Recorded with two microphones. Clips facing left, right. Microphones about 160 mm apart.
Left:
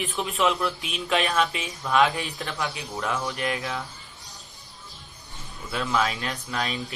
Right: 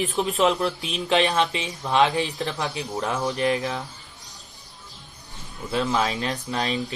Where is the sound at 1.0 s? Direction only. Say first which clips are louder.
Right 3 dB; 25° right (ahead or behind).